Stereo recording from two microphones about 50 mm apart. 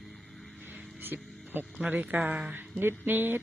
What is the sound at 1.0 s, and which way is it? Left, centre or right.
Music, right.